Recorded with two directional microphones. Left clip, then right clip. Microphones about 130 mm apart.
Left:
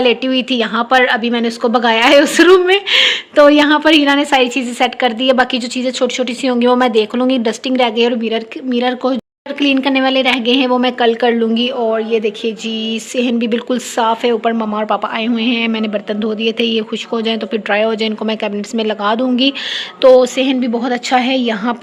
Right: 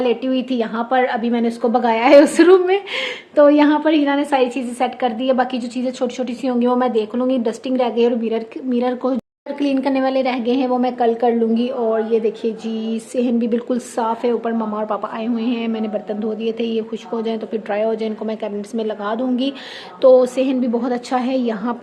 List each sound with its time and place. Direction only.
0.0 s a woman's voice: 15° left (ahead or behind)
20.0 s a woman's voice: 5° left (ahead or behind)